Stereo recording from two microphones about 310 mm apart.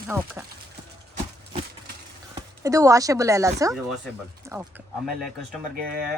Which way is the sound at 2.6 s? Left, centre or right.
Centre.